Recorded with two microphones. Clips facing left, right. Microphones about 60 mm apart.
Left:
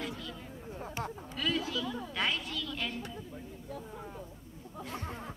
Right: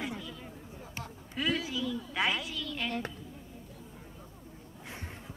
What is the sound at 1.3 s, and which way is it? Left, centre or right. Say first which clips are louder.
Speech: right 2 dB; centre.